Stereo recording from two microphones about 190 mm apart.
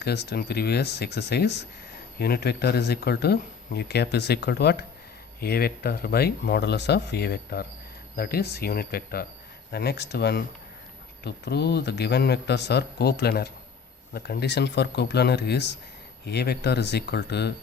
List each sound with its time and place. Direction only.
0.0 s speech: 60° left (ahead or behind)